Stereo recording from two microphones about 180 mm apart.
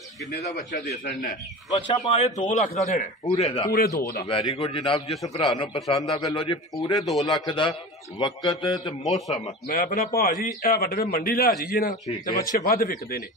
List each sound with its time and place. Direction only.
0.7 s a man's voice: 55° left (ahead or behind)
2.0 s a man's voice: 35° left (ahead or behind)
3.7 s a man's voice: 60° left (ahead or behind)
4.3 s a man's voice: 30° left (ahead or behind)
5.8 s a man's voice: centre (ahead or behind)
6.1 s a man's voice: 25° left (ahead or behind)
7.0 s a man's voice: centre (ahead or behind)
7.2 s a man's voice: 25° left (ahead or behind)
9.7 s a man's voice: 50° left (ahead or behind)